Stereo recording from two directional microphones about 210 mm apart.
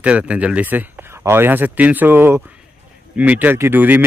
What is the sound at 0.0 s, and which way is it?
A man's voice, 5° right (ahead or behind).